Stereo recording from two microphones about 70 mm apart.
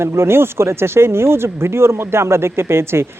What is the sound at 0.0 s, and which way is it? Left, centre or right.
Speech, right.